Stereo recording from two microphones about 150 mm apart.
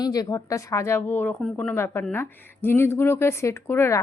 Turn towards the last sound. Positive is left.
turn(degrees=15)  # may be behind; listen again after turning